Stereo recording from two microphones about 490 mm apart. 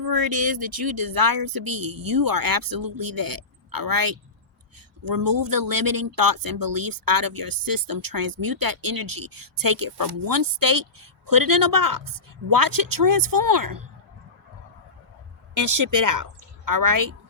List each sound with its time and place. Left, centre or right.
0.0 s speech: right
15.5 s a woman's voice: right